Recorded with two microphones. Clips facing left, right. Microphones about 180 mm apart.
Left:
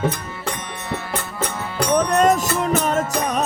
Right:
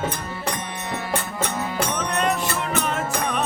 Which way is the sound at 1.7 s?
45° left (ahead or behind).